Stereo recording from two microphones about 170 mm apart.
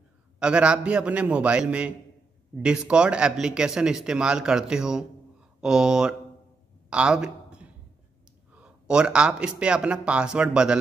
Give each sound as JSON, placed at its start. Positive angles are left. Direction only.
{"t": 0.4, "sound": "a man's voice", "side_deg": -5}
{"t": 6.9, "sound": "a sound", "side_deg": -5}
{"t": 8.5, "sound": "speech", "side_deg": -5}